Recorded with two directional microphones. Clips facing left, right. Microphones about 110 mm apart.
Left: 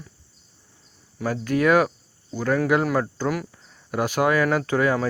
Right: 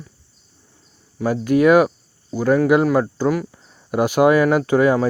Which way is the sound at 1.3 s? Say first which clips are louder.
Right 6 dB; 15° right (ahead or behind).